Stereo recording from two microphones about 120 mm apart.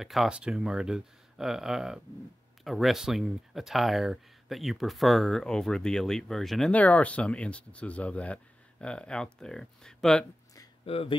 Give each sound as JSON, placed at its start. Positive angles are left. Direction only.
{"t": 0.0, "sound": "speech", "side_deg": 0}
{"t": 6.7, "sound": "speech", "side_deg": 10}
{"t": 10.9, "sound": "speech", "side_deg": 55}